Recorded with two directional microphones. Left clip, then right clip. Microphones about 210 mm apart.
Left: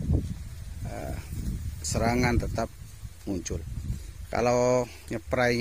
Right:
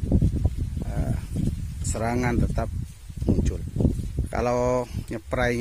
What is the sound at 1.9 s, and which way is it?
Speech, 5° right (ahead or behind).